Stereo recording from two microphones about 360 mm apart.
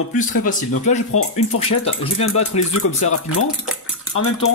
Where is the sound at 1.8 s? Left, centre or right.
Centre.